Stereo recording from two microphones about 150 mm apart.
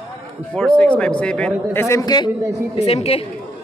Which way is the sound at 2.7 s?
45° left (ahead or behind).